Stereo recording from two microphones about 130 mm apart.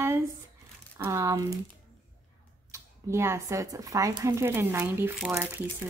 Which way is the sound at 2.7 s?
20° right (ahead or behind).